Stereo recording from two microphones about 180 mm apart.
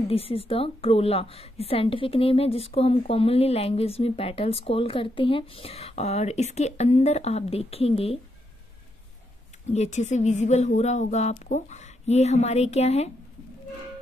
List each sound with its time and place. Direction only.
0.1 s a woman's voice: 35° left (ahead or behind)
9.7 s a woman's voice: 40° left (ahead or behind)